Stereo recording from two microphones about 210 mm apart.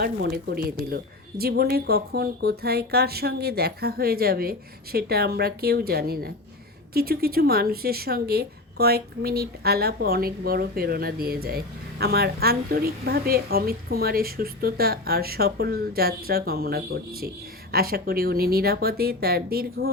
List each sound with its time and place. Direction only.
0.0 s speech: 50° right (ahead or behind)